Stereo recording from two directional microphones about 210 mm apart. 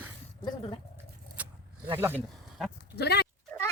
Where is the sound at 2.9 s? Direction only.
50° left (ahead or behind).